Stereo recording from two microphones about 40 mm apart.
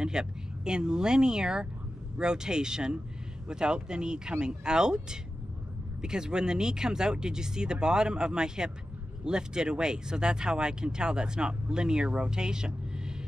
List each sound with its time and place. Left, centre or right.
0.0 s speech: centre